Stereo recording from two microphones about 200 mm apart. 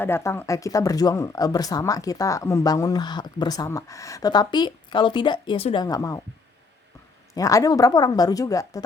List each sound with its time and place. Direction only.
0.0 s speech: 15° left (ahead or behind)
7.3 s speech: 15° left (ahead or behind)